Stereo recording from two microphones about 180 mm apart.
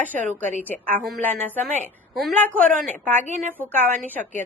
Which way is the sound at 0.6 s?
10° left (ahead or behind).